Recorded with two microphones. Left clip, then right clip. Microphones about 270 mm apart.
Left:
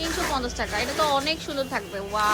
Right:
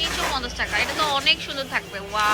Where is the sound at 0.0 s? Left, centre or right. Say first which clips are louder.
Right 2 dB; centre.